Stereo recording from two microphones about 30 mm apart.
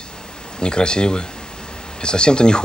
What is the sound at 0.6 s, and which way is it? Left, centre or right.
A woman's voice, left.